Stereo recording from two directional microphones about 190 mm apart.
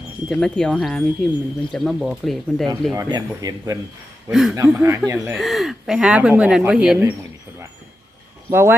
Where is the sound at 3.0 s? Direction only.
20° right (ahead or behind).